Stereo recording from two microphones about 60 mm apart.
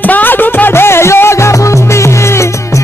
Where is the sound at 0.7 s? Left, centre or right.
Left.